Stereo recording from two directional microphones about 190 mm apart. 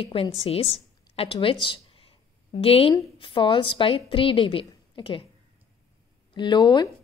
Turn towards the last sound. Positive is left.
turn(degrees=25)  # may be behind; listen again after turning